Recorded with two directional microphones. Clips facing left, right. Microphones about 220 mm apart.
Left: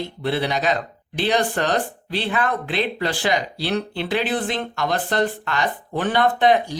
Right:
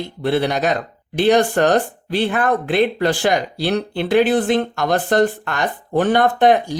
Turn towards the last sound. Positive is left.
turn(degrees=-50)  # may be behind; listen again after turning